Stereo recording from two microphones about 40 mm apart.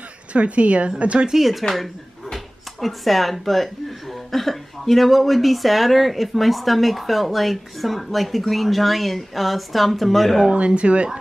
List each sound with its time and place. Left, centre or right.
0.3 s speech: right
1.3 s speech: centre
10.5 s speech: right